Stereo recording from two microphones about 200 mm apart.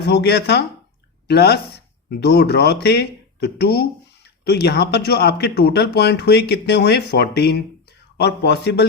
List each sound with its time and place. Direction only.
0.0 s speech: 55° left (ahead or behind)